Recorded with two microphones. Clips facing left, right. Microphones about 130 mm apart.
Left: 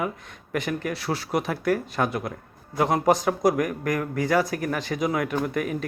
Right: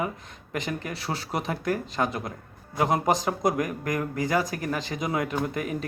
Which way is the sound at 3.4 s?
20° right (ahead or behind).